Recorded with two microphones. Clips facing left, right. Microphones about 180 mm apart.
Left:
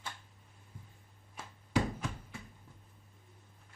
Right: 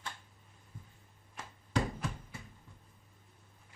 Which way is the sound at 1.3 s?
5° left (ahead or behind).